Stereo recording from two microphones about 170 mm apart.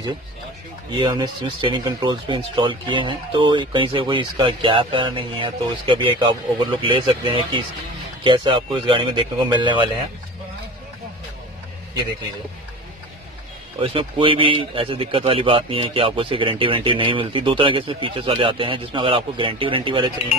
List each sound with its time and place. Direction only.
0.9 s speech: 25° right (ahead or behind)
13.7 s speech: 30° right (ahead or behind)